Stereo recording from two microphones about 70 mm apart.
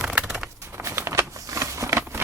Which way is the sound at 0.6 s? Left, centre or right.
Right.